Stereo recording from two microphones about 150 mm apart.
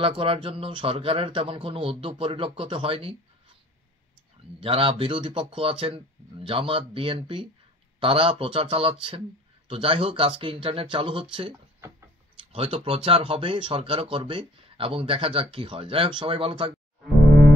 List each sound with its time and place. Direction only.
0.0 s speech: 40° right (ahead or behind)
4.6 s speech: 40° right (ahead or behind)
12.5 s speech: 40° right (ahead or behind)